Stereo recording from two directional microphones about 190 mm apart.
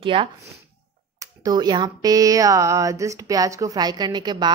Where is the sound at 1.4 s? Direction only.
20° right (ahead or behind).